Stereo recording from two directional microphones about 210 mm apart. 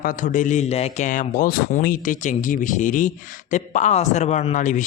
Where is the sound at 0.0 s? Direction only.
40° left (ahead or behind).